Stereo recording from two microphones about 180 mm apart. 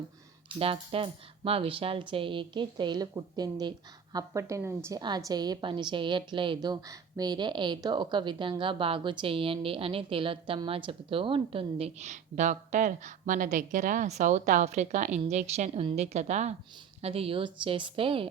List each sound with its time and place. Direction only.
0.4 s a woman's voice: 30° right (ahead or behind)